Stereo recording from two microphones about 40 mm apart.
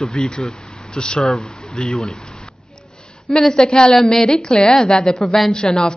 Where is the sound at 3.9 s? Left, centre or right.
Centre.